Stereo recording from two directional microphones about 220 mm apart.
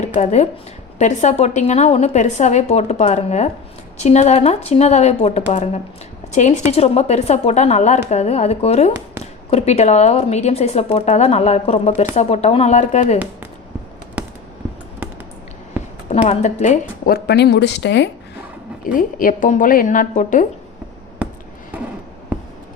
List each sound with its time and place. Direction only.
0.0 s a woman's voice: 30° left (ahead or behind)
16.0 s speech: 30° left (ahead or behind); by 18.1 s 50° left (ahead or behind)
18.9 s a woman's voice: 40° left (ahead or behind)
21.2 s a sound: 5° right (ahead or behind)